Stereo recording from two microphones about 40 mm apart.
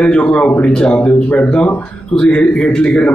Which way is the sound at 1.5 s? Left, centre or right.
Left.